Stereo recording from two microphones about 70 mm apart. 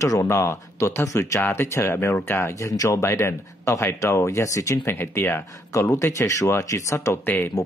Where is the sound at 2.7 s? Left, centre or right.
Left.